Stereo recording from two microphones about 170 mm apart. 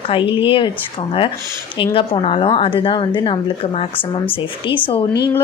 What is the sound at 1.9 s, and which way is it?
Speech, 30° left (ahead or behind).